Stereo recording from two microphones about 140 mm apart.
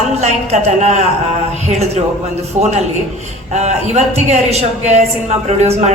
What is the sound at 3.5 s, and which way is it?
A man's voice, 55° right (ahead or behind).